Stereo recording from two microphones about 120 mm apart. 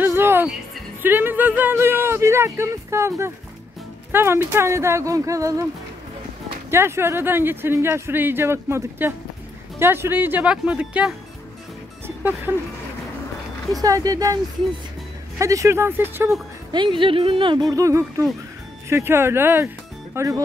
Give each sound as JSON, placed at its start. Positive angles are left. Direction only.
{"t": 0.0, "sound": "music", "side_deg": -20}
{"t": 1.0, "sound": "speech", "side_deg": -15}
{"t": 6.7, "sound": "speech", "side_deg": -20}
{"t": 12.2, "sound": "speech", "side_deg": -15}
{"t": 13.7, "sound": "speech", "side_deg": -30}
{"t": 16.7, "sound": "speech", "side_deg": -45}
{"t": 17.6, "sound": "speech", "side_deg": -25}